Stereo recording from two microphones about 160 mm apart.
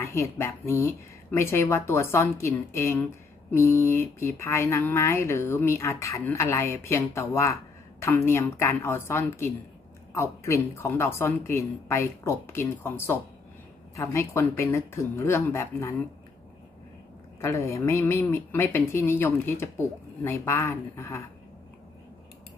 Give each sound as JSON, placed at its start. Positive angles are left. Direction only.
{"t": 0.0, "sound": "speech", "side_deg": 15}
{"t": 17.4, "sound": "speech", "side_deg": 15}